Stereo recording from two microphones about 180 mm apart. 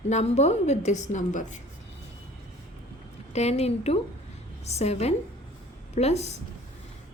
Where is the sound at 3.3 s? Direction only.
35° left (ahead or behind).